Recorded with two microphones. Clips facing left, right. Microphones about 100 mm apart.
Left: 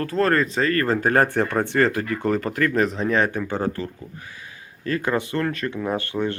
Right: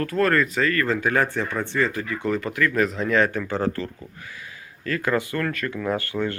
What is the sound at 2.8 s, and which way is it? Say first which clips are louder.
Speech: even; 20° left (ahead or behind).